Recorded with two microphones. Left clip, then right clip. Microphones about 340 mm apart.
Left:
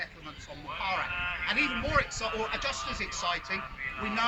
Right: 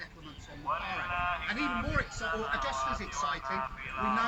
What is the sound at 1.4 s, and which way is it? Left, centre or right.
A man's voice, centre.